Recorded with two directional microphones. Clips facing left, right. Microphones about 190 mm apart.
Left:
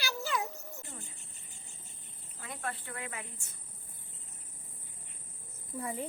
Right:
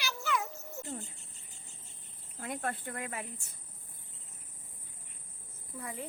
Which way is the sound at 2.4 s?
50° right (ahead or behind).